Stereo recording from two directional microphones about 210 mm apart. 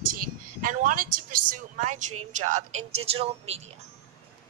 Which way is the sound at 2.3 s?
35° right (ahead or behind).